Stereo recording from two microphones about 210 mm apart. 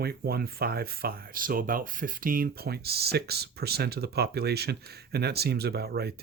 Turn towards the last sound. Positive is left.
turn(degrees=-50)  # may be behind; listen again after turning